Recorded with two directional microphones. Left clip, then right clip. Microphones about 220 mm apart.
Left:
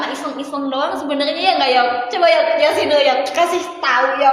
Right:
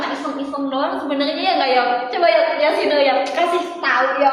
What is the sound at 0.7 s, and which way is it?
A woman's voice, 50° left (ahead or behind).